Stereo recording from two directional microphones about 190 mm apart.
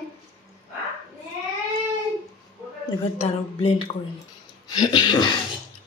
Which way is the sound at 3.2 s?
30° left (ahead or behind).